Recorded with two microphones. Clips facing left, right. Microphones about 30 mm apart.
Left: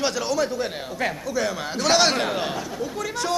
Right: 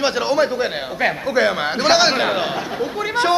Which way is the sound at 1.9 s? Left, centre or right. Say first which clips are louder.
Right 4 dB; right.